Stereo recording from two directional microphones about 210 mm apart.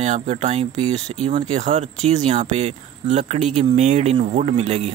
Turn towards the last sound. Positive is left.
turn(degrees=-30)  # may be behind; listen again after turning